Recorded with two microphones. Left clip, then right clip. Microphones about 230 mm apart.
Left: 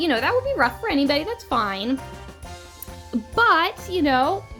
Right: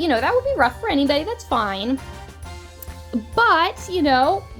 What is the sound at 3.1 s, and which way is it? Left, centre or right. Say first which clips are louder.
A woman's voice: right 1 dB; left.